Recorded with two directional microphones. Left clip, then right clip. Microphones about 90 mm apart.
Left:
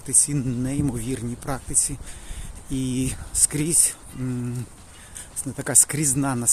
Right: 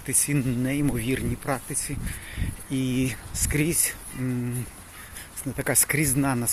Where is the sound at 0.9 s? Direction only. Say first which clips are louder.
Right 2 dB; 20° left (ahead or behind).